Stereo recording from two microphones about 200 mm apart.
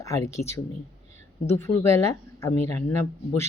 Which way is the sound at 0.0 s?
15° left (ahead or behind).